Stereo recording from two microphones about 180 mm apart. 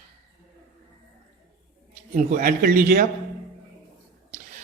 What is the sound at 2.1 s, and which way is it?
Speech, 50° right (ahead or behind).